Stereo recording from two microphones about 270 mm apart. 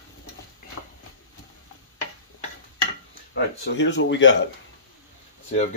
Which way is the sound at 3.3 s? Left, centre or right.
Left.